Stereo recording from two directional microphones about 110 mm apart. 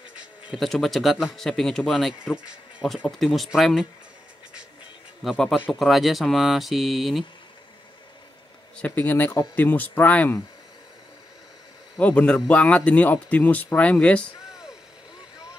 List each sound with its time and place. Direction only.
0.6 s speech: centre (ahead or behind)
5.2 s speech: centre (ahead or behind)
8.7 s speech: 15° left (ahead or behind)
12.0 s speech: 10° left (ahead or behind)